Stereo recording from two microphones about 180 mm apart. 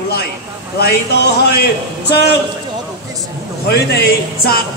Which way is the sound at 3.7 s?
60° left (ahead or behind).